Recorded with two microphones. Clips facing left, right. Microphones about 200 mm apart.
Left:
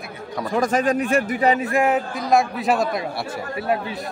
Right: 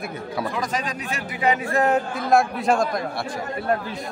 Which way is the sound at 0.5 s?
50° left (ahead or behind).